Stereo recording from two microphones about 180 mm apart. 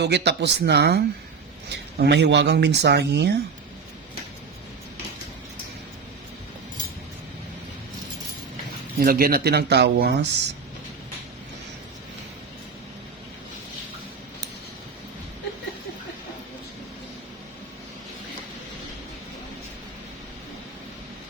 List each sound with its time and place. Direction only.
0.0 s speech: 70° right (ahead or behind)
9.0 s speech: 55° right (ahead or behind)